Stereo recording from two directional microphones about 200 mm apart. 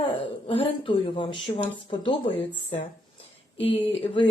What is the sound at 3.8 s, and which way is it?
Speech, 30° left (ahead or behind).